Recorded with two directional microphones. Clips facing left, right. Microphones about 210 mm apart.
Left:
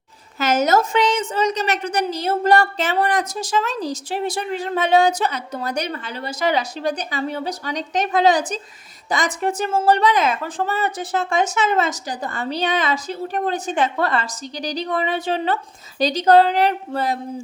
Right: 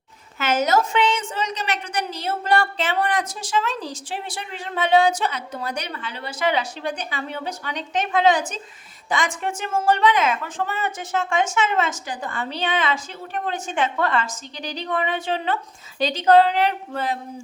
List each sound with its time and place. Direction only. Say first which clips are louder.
0.3 s a woman's voice: left 3 dB; 40° left (ahead or behind)